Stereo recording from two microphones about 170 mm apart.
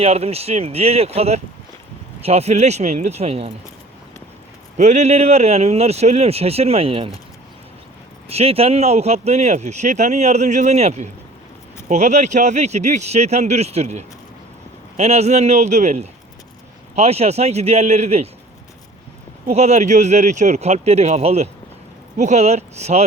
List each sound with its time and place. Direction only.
0.0 s speech: 35° right (ahead or behind)
4.8 s speech: 45° right (ahead or behind)
8.3 s speech: 35° right (ahead or behind)
19.5 s speech: 40° right (ahead or behind)